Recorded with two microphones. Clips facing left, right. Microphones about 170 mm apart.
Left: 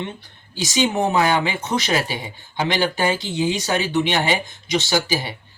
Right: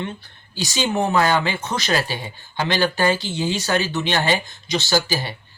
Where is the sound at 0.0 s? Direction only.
20° left (ahead or behind).